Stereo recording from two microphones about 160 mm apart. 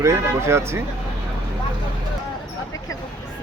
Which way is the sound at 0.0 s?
15° right (ahead or behind).